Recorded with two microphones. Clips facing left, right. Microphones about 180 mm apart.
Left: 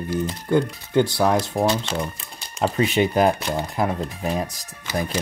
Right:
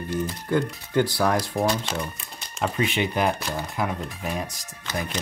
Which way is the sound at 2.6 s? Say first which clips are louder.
Left 5 dB; 40° left (ahead or behind).